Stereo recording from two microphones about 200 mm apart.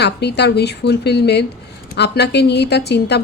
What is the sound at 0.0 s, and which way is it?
A woman's voice, 55° left (ahead or behind).